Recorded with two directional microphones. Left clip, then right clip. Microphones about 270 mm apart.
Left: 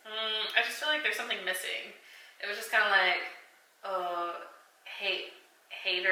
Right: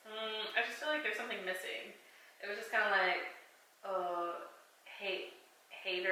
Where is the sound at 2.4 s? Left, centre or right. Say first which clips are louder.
Left 7 dB; centre.